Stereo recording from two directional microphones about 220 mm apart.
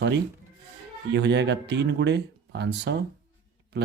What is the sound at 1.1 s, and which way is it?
A man's voice, 50° right (ahead or behind).